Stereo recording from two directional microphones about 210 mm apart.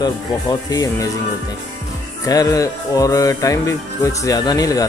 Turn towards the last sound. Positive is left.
turn(degrees=15)  # may be behind; listen again after turning